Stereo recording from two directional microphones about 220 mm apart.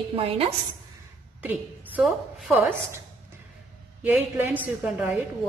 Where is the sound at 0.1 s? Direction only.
25° right (ahead or behind).